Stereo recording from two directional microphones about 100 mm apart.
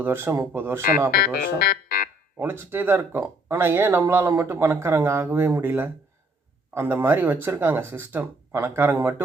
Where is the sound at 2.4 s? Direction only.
20° right (ahead or behind).